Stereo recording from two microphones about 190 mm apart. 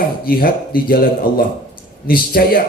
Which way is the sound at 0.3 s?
50° left (ahead or behind).